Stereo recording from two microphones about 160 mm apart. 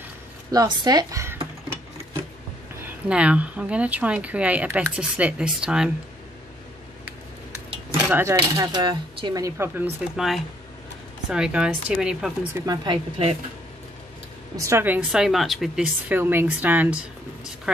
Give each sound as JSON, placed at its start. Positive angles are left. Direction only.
{"t": 0.5, "sound": "speech", "side_deg": -25}
{"t": 3.1, "sound": "speech", "side_deg": -5}
{"t": 8.0, "sound": "speech", "side_deg": -15}
{"t": 12.5, "sound": "speech", "side_deg": -25}
{"t": 14.6, "sound": "speech", "side_deg": -15}